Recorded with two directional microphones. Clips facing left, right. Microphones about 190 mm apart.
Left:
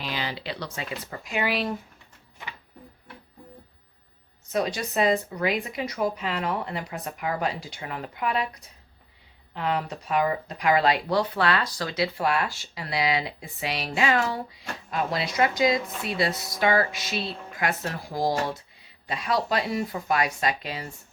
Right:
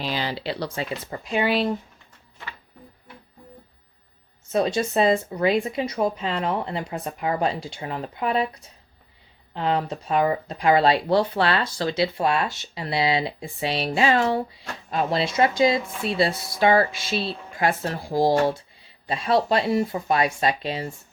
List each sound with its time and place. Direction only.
0.0 s speech: 35° right (ahead or behind)
4.5 s speech: 30° right (ahead or behind)
9.6 s speech: 30° right (ahead or behind)